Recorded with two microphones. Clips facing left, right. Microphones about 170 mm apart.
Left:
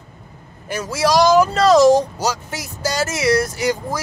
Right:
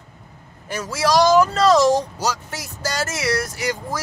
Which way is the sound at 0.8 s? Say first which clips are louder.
Left 2 dB; 15° left (ahead or behind).